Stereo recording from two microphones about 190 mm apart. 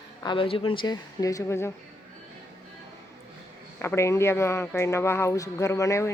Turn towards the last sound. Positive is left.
turn(degrees=15)  # may be behind; listen again after turning